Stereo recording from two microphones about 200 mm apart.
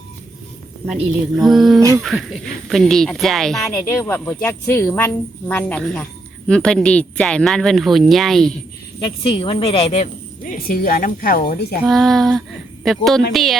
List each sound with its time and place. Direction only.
1.4 s speech: centre (ahead or behind)
3.7 s speech: 15° left (ahead or behind)
9.0 s a woman's voice: 25° left (ahead or behind); by 11.8 s 50° left (ahead or behind)
11.9 s speech: centre (ahead or behind)